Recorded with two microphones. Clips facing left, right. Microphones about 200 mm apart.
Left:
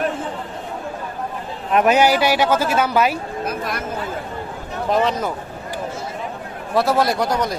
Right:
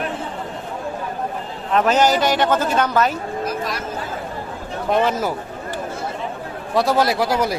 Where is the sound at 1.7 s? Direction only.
10° left (ahead or behind).